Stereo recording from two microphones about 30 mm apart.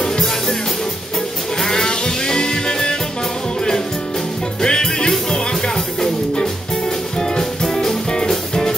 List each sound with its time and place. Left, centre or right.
1.6 s music: centre
4.6 s music: left